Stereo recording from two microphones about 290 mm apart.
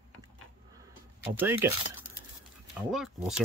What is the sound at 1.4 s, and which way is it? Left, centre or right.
Speech, centre.